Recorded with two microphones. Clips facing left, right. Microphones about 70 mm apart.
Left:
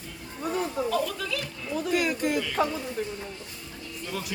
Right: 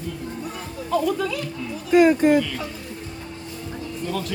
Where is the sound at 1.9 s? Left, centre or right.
Right.